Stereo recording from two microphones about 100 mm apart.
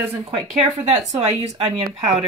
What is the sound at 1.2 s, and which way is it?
Speech, 90° right.